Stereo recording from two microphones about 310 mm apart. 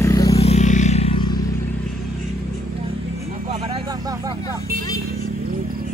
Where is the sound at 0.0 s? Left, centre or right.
Centre.